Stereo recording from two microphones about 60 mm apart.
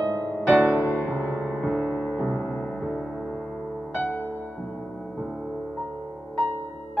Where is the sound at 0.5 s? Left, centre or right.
Centre.